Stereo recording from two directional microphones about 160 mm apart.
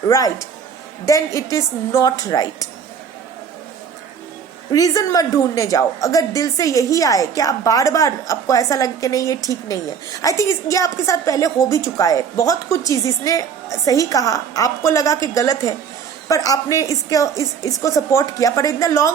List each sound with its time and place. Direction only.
0.1 s a woman's voice: 20° left (ahead or behind)
4.7 s a woman's voice: 20° left (ahead or behind)